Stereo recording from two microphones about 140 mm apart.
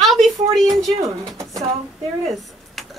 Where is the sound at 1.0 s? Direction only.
25° right (ahead or behind).